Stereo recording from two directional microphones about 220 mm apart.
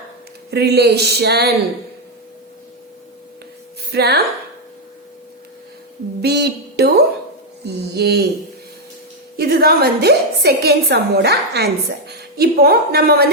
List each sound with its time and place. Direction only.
0.5 s a woman's voice: 45° right (ahead or behind)
3.9 s a woman's voice: 45° right (ahead or behind)
6.2 s a woman's voice: 50° right (ahead or behind)
9.4 s a woman's voice: 45° right (ahead or behind)